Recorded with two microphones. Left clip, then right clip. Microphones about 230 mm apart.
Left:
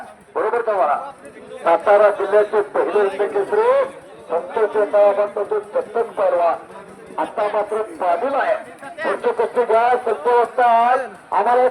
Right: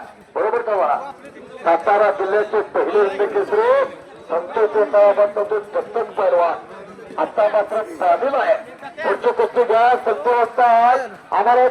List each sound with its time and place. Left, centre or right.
0.3 s a sound: left
1.6 s speech: left
2.8 s a man's voice: centre
3.2 s a man's voice: centre
5.7 s a man's voice: right
10.2 s speech: centre
10.7 s a man's voice: centre
11.3 s a man's voice: centre